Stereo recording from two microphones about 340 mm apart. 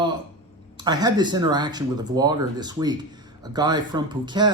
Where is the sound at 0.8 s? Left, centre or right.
Centre.